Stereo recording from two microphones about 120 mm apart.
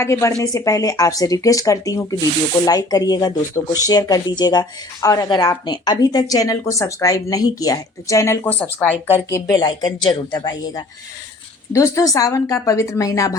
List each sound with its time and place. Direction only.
0.0 s speech: 25° left (ahead or behind)
9.6 s speech: 40° left (ahead or behind)